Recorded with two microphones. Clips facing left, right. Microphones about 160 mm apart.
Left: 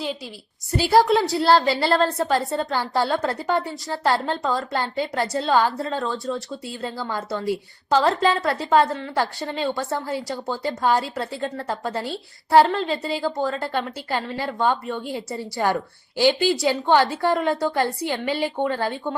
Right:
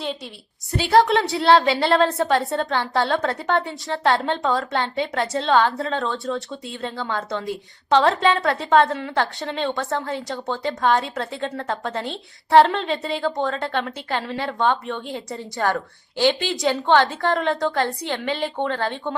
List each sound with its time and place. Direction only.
0.7 s a woman's voice: centre (ahead or behind)
15.6 s speech: 15° left (ahead or behind)
16.2 s a woman's voice: centre (ahead or behind)